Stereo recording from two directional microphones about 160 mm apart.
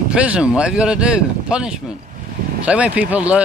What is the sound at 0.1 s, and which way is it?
Speech, 5° right (ahead or behind).